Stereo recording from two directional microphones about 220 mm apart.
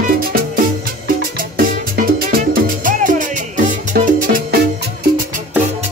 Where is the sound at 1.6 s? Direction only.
40° right (ahead or behind).